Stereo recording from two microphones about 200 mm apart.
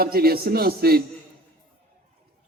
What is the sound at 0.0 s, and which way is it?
A man's voice, 50° right (ahead or behind).